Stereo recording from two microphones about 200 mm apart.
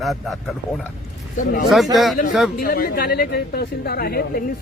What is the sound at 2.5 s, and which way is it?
A woman's voice, 45° left (ahead or behind).